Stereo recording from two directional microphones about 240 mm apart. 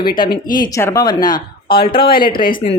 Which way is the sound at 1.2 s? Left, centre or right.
Left.